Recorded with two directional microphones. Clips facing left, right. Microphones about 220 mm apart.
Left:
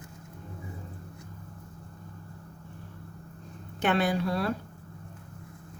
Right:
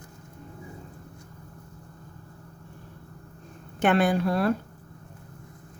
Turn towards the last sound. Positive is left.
turn(degrees=-55)  # may be behind; listen again after turning